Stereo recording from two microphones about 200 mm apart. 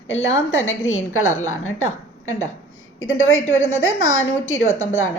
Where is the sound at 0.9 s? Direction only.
90° left.